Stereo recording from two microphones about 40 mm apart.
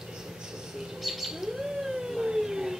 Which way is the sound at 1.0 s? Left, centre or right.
Centre.